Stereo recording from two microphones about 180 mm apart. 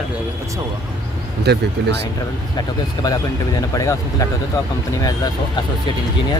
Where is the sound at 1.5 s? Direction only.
65° right (ahead or behind).